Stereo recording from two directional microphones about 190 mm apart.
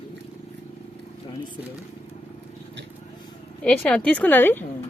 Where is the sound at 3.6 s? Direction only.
5° left (ahead or behind).